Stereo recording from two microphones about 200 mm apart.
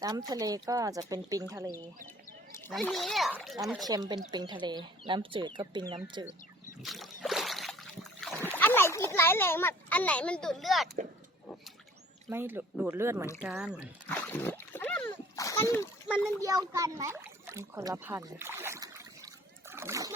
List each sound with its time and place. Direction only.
0.0 s speech: 20° right (ahead or behind)
2.7 s a child's voice: centre (ahead or behind)
3.8 s speech: 20° right (ahead or behind)
6.8 s a sound: centre (ahead or behind)
8.4 s a child's voice: 10° left (ahead or behind)
12.3 s speech: 10° right (ahead or behind)
13.2 s speech: 15° left (ahead or behind)
14.1 s splash: 10° left (ahead or behind)
16.4 s speech: 15° right (ahead or behind)